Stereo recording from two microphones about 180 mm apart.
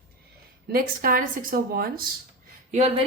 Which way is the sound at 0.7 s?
55° right (ahead or behind).